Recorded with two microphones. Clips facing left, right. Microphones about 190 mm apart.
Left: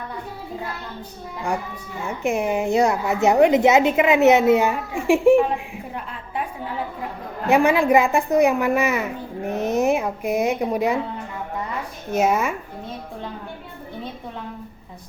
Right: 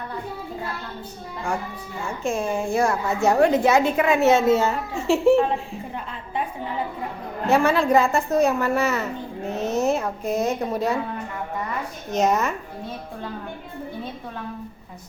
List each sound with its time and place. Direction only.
2.0 s a woman's voice: 20° left (ahead or behind)
7.4 s a woman's voice: 15° left (ahead or behind)
12.1 s a woman's voice: 10° left (ahead or behind)